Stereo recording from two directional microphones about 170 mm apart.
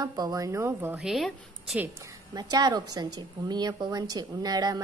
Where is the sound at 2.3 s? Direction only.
25° right (ahead or behind).